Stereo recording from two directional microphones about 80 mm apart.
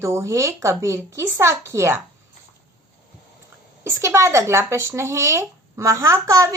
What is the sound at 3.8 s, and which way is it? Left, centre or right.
Speech, right.